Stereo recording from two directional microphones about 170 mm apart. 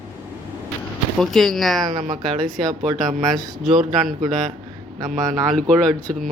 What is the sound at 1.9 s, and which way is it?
Speech, 50° right (ahead or behind).